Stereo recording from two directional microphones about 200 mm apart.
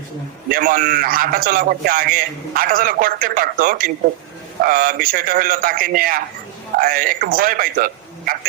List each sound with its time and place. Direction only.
0.5 s a man's voice: 45° right (ahead or behind)